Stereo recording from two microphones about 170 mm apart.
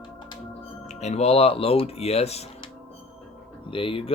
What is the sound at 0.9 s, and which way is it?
Speech, 40° left (ahead or behind).